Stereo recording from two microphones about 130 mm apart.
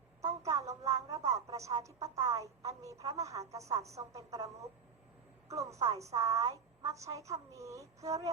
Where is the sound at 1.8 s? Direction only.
25° right (ahead or behind).